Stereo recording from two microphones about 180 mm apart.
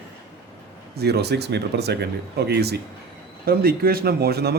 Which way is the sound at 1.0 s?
65° right (ahead or behind).